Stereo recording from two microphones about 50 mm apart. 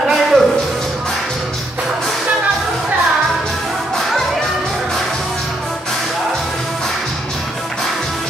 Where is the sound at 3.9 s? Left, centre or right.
Centre.